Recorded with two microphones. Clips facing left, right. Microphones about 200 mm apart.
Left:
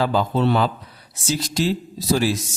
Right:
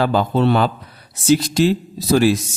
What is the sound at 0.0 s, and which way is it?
Speech, 65° right (ahead or behind).